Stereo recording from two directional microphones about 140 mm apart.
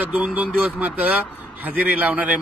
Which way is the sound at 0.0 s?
10° right (ahead or behind).